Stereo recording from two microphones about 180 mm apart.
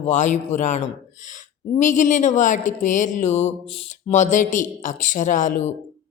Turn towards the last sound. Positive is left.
turn(degrees=45)  # may be behind; listen again after turning